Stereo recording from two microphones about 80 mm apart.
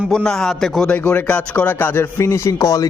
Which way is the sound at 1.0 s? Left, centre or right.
Left.